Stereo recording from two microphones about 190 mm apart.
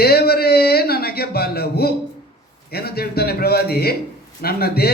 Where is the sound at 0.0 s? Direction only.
55° left (ahead or behind).